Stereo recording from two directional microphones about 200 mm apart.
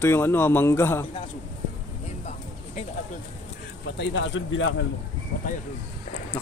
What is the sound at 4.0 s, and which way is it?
Speech, 70° left (ahead or behind).